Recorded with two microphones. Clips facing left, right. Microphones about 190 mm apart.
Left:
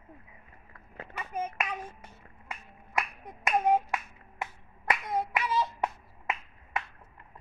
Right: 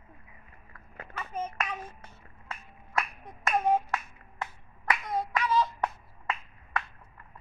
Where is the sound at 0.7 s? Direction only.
30° left (ahead or behind).